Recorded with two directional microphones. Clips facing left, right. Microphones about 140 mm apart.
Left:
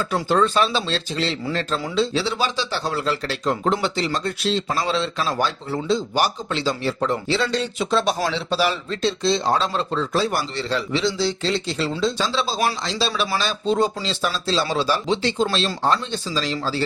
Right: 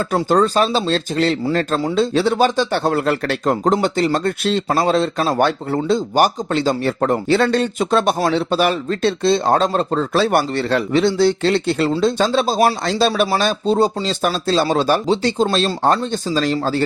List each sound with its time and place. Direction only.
0.1 s speech: 40° right (ahead or behind)
10.2 s speech: 65° right (ahead or behind)
15.0 s speech: 35° right (ahead or behind)
15.5 s speech: 45° right (ahead or behind)